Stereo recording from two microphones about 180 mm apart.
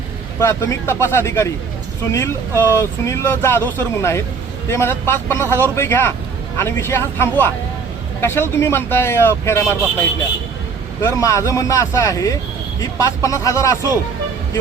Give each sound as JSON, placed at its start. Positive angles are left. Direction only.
{"t": 0.3, "sound": "speech", "side_deg": 15}
{"t": 11.0, "sound": "speech", "side_deg": 15}